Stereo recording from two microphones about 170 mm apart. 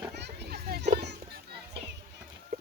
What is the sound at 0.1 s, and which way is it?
Children playing, 80° right.